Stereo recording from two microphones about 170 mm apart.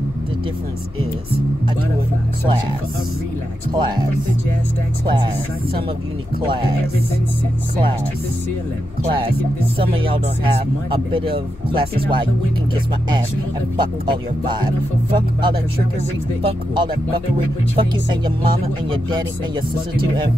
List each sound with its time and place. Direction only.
3.7 s speech: 25° right (ahead or behind)
6.4 s speech: 30° right (ahead or behind)
9.0 s speech: 30° right (ahead or behind)
13.7 s speech: 25° right (ahead or behind)